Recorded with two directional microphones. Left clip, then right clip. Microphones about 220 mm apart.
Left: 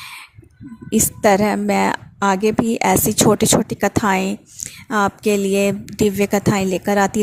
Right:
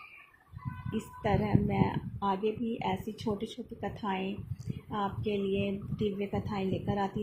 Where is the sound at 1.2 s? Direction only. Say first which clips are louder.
Left 15 dB; 50° left (ahead or behind).